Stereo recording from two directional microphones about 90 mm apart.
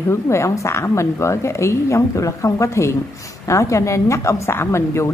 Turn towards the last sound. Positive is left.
turn(degrees=30)  # may be behind; listen again after turning